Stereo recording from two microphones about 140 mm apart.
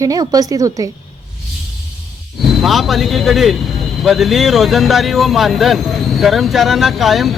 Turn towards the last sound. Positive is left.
turn(degrees=0)  # may be behind; listen again after turning